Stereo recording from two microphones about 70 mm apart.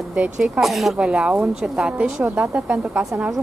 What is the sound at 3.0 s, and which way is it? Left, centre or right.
Speech, centre.